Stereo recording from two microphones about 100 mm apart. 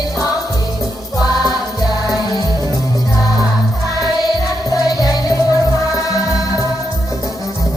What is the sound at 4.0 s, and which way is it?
Music, 40° left (ahead or behind).